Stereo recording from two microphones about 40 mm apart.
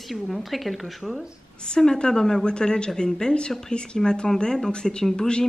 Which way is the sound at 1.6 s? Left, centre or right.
Centre.